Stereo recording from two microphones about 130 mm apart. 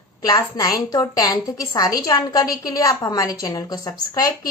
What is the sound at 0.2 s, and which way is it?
A woman's voice, 30° left (ahead or behind).